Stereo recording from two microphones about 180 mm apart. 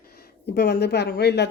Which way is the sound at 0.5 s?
65° left (ahead or behind).